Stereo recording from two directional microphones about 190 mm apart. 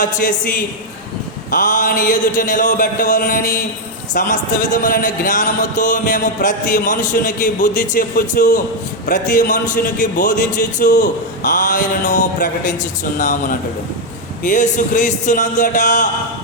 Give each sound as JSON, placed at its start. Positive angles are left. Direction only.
{"t": 0.0, "sound": "a man's voice", "side_deg": 45}
{"t": 1.5, "sound": "a man's voice", "side_deg": 45}